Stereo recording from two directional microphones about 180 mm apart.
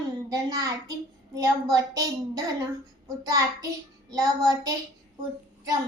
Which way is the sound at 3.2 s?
20° right (ahead or behind).